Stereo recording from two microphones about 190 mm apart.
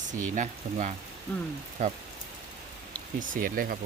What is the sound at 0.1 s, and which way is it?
Speech, 40° right (ahead or behind).